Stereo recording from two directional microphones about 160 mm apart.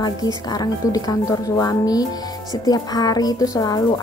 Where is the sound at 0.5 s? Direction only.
25° left (ahead or behind).